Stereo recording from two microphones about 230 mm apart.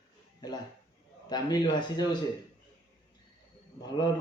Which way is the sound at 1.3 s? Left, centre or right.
Centre.